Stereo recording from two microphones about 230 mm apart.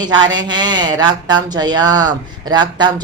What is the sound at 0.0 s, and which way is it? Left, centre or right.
Speech, centre.